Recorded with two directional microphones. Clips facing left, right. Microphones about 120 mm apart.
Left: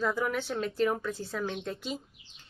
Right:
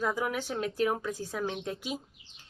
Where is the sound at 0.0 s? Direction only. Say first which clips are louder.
Left 1 dB; 10° right (ahead or behind).